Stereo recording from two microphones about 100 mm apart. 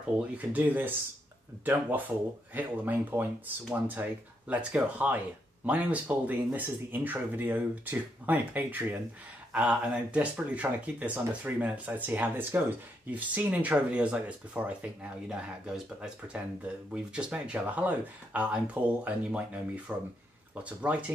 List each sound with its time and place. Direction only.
0.4 s speech: 15° right (ahead or behind)